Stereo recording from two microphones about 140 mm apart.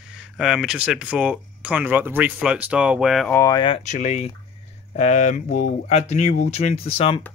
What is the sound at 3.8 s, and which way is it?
Speech, 55° left (ahead or behind).